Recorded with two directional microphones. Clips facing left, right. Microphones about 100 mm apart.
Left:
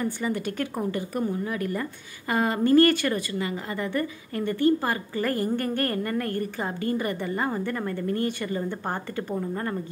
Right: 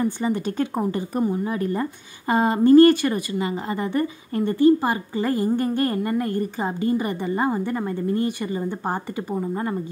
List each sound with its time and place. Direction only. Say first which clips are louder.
0.0 s a woman's voice: right 4 dB; 30° right (ahead or behind)